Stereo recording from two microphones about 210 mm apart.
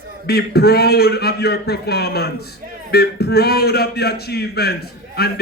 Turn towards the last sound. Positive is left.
turn(degrees=50)  # may be behind; listen again after turning